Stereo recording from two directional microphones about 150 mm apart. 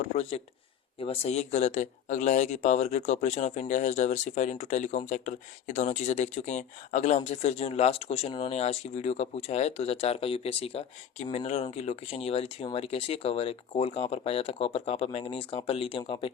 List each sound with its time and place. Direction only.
0.0 s speech: 45° left (ahead or behind)